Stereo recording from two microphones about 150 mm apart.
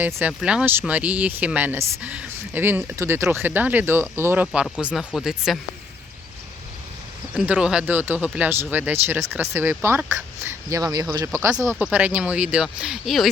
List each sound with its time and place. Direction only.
0.0 s speech: 10° right (ahead or behind)
7.3 s speech: 10° right (ahead or behind)